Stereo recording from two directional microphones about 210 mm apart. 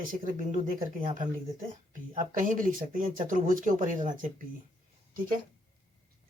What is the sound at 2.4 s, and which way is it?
Speech, 40° right (ahead or behind).